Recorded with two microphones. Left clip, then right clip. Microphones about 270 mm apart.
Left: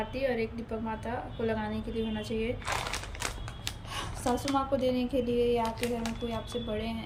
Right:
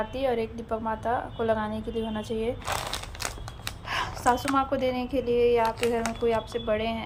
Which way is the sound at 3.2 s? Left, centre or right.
Centre.